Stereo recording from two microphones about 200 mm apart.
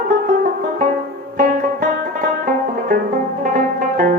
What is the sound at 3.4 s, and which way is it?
Music, 40° right (ahead or behind).